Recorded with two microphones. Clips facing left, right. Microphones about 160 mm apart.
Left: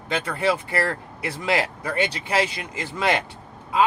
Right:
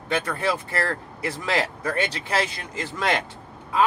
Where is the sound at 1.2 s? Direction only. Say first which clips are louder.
Left 1 dB; 10° left (ahead or behind).